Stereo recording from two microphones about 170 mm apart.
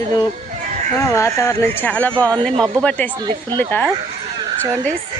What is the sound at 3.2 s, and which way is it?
Speech, 25° right (ahead or behind).